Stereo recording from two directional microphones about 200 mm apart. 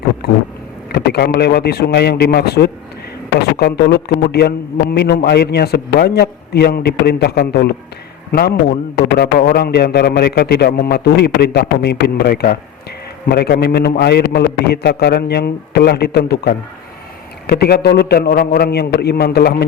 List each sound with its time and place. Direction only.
0.9 s a man's voice: 55° left (ahead or behind)